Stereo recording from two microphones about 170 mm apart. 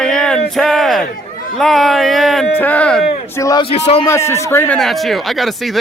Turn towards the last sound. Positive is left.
turn(degrees=0)  # may be behind; listen again after turning